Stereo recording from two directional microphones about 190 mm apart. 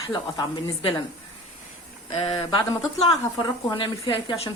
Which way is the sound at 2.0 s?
25° left (ahead or behind).